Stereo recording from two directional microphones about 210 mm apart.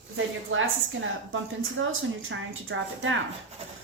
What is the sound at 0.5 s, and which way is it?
Speech, 70° right (ahead or behind).